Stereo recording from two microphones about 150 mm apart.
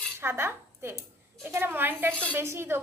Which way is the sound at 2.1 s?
10° left (ahead or behind).